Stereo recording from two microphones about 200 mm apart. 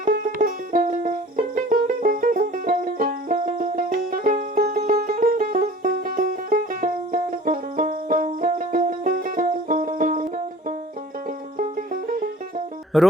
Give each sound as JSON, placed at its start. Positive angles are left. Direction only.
{"t": 0.0, "sound": "music", "side_deg": -45}
{"t": 12.9, "sound": "speech", "side_deg": 0}